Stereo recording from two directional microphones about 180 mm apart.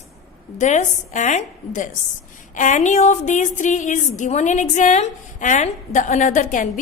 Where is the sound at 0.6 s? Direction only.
40° left (ahead or behind).